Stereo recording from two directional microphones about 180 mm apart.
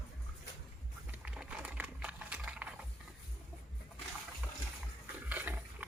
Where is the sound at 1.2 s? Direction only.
5° right (ahead or behind).